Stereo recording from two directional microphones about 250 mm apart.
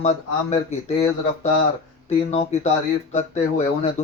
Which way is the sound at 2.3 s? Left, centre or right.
Left.